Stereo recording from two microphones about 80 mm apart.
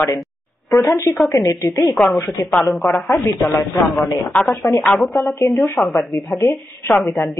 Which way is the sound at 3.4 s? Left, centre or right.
Left.